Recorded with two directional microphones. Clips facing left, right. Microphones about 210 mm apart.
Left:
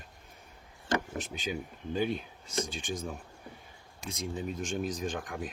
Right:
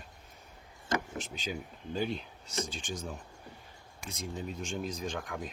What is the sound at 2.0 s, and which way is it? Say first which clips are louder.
Speech: left 2 dB; 55° left (ahead or behind).